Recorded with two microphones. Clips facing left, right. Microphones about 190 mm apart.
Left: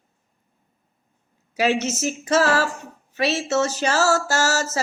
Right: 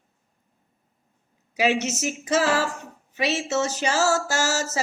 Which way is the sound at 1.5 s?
15° right (ahead or behind).